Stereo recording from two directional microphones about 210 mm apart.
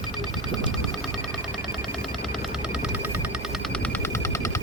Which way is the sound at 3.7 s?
10° left (ahead or behind).